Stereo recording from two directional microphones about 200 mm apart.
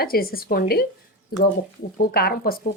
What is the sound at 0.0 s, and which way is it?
Speech, 50° left (ahead or behind).